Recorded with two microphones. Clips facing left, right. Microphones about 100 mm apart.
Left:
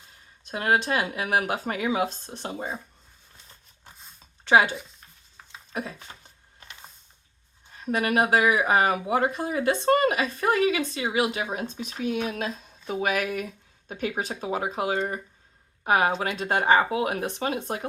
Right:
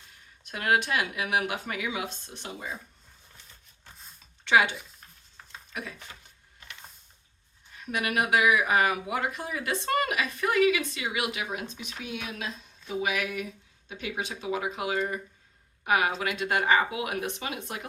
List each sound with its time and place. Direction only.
0.4 s speech: 30° left (ahead or behind)
4.4 s speech: 35° left (ahead or behind)
5.4 s a sound: 5° left (ahead or behind)
5.7 s speech: 35° left (ahead or behind)
7.7 s speech: 35° left (ahead or behind)